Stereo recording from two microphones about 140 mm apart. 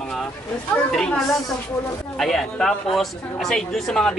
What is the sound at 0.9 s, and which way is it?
Crowing, centre (ahead or behind).